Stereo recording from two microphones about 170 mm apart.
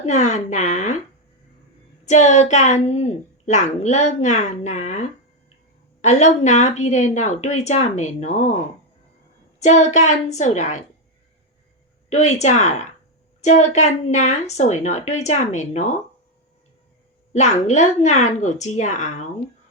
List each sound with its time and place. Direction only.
0.0 s a woman's voice: 45° left (ahead or behind)
2.0 s a woman's voice: 45° left (ahead or behind)
9.6 s a woman's voice: 45° left (ahead or behind)
12.0 s a woman's voice: 40° left (ahead or behind)
17.3 s a woman's voice: 45° left (ahead or behind)